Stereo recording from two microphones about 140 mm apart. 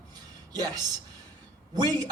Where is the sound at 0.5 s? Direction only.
30° right (ahead or behind).